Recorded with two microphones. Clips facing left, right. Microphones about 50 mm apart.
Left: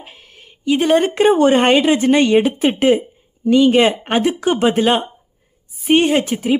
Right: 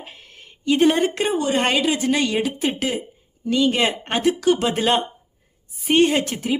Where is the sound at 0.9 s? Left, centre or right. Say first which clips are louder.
Left 8 dB; left; by 4.2 s centre.